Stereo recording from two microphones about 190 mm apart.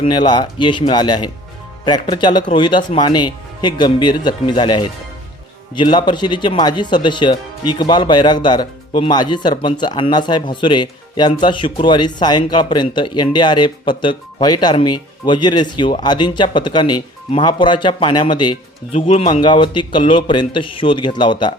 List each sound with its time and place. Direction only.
0.0 s speech: 25° left (ahead or behind)